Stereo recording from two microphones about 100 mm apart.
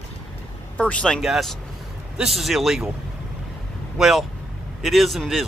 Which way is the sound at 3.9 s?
Centre (ahead or behind).